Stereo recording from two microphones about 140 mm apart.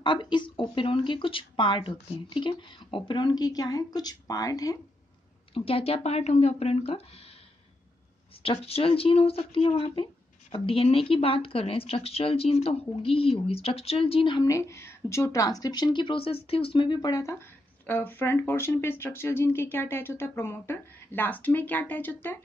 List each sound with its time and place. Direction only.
0.0 s speech: 35° left (ahead or behind)
5.5 s speech: 45° left (ahead or behind)
8.4 s speech: 45° left (ahead or behind); by 22.4 s 15° left (ahead or behind)